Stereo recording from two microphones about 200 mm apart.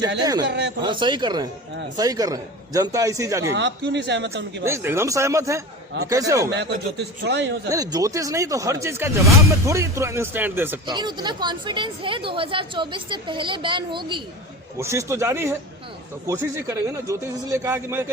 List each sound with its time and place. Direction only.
0.2 s speech: 20° right (ahead or behind)
0.4 s a man's voice: 60° right (ahead or behind)
0.8 s speech: 25° right (ahead or behind)
3.5 s a man's voice: 60° right (ahead or behind)
4.6 s speech: 10° right (ahead or behind)
6.5 s a man's voice: 60° right (ahead or behind)
7.7 s speech: 20° right (ahead or behind)
10.8 s speech: 20° right (ahead or behind)